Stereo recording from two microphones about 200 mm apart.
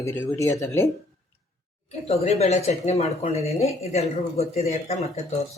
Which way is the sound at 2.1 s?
30° left (ahead or behind).